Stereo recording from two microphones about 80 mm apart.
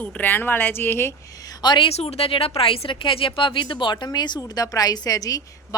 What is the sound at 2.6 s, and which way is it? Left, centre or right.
Speech, left.